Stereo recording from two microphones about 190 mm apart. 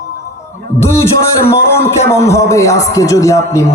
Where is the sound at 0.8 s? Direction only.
15° left (ahead or behind).